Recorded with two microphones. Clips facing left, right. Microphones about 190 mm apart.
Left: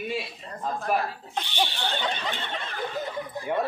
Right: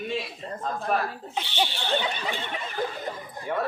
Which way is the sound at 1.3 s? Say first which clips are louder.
Even; 10° right (ahead or behind).